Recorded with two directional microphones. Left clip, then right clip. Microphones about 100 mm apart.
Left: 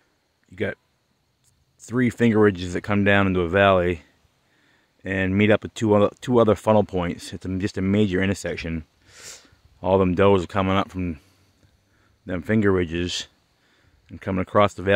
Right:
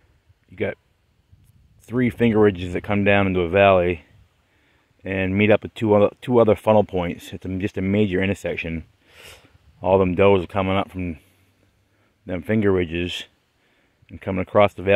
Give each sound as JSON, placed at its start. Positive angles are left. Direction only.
{"t": 0.5, "sound": "a sound", "side_deg": 25}
{"t": 1.9, "sound": "speech", "side_deg": 20}
{"t": 9.8, "sound": "speech", "side_deg": 30}
{"t": 12.3, "sound": "speech", "side_deg": 25}